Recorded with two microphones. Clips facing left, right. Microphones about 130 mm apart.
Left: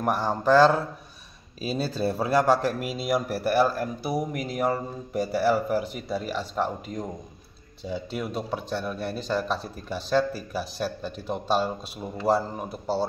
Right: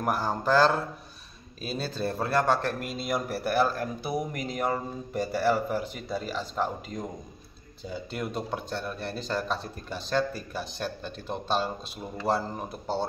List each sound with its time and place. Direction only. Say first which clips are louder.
0.0 s a man's voice: left 3 dB; centre (ahead or behind)